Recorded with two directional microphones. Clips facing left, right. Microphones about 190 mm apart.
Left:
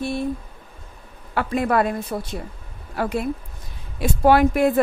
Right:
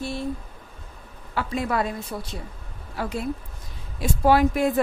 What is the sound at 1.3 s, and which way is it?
Speech, 55° left (ahead or behind).